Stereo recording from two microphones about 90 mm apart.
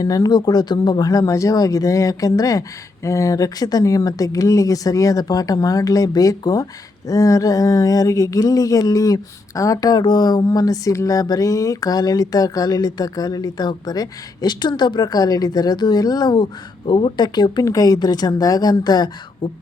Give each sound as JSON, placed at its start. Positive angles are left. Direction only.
{"t": 0.0, "sound": "speech", "side_deg": 40}
{"t": 17.7, "sound": "speech", "side_deg": 40}